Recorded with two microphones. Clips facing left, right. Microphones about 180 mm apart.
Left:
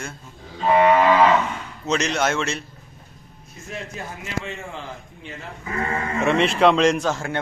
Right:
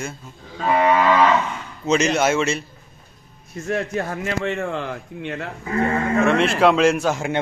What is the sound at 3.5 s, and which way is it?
Speech, 65° right (ahead or behind).